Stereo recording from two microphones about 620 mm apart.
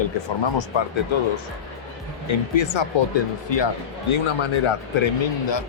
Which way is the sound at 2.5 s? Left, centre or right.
Left.